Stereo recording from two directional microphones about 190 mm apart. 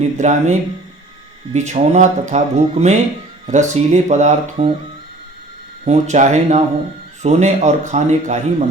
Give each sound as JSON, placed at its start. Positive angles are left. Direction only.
{"t": 0.2, "sound": "speech", "side_deg": -40}
{"t": 1.5, "sound": "speech", "side_deg": -35}
{"t": 5.8, "sound": "speech", "side_deg": -35}